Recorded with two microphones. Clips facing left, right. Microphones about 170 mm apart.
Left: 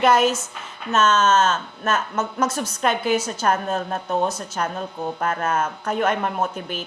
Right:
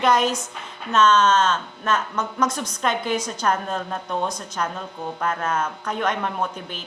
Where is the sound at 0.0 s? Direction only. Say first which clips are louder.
Left 2 dB; 5° left (ahead or behind).